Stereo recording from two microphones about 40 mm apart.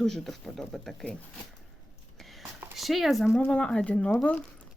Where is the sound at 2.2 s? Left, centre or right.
Centre.